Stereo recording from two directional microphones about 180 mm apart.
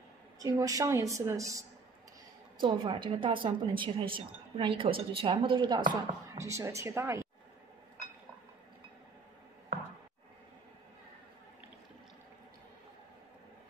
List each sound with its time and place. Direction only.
0.4 s a woman's voice: 20° right (ahead or behind)